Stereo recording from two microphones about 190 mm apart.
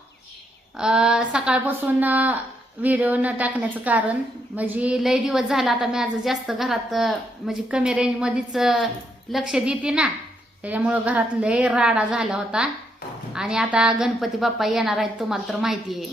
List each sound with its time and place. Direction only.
0.8 s a woman's voice: 5° right (ahead or behind)